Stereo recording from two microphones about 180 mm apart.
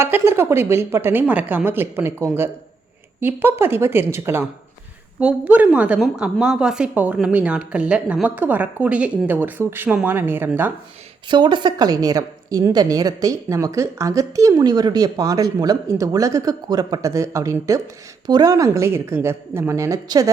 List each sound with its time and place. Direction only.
0.0 s a woman's voice: 15° right (ahead or behind)
11.3 s a woman's voice: 25° right (ahead or behind)